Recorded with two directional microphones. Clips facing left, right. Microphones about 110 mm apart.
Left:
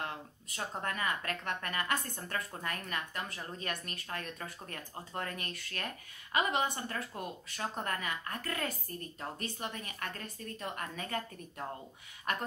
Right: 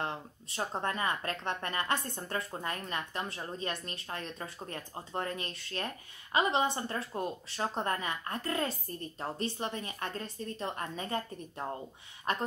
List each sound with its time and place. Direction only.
0.0 s speech: 30° right (ahead or behind)